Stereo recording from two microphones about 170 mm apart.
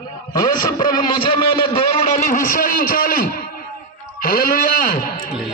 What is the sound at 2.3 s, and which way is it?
Speech, 55° left (ahead or behind).